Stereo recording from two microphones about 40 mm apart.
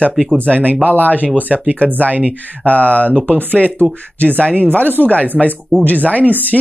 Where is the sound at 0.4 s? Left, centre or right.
Right.